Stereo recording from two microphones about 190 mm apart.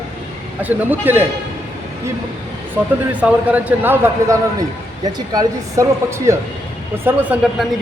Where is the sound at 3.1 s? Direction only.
10° right (ahead or behind).